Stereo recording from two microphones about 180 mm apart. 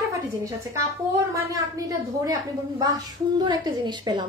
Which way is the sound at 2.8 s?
25° right (ahead or behind).